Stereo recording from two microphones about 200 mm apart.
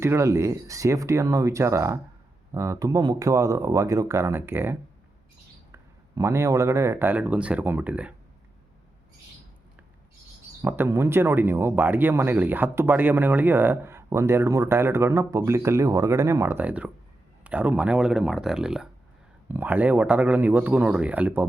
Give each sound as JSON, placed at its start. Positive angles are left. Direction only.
{"t": 0.0, "sound": "speech", "side_deg": -15}
{"t": 10.6, "sound": "speech", "side_deg": -10}